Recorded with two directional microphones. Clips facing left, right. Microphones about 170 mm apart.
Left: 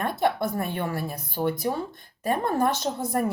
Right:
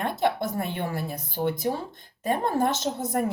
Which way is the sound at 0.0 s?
25° right (ahead or behind).